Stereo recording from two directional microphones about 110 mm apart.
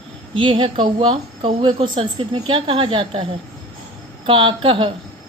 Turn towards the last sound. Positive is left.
turn(degrees=-55)  # may be behind; listen again after turning